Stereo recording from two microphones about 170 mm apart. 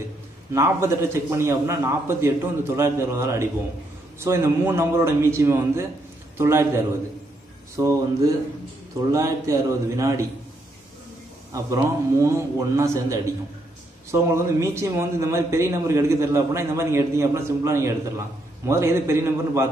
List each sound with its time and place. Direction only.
0.5 s a man's voice: 15° right (ahead or behind)
11.5 s a man's voice: 20° right (ahead or behind)